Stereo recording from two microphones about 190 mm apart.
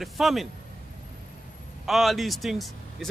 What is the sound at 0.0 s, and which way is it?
Speech, centre (ahead or behind).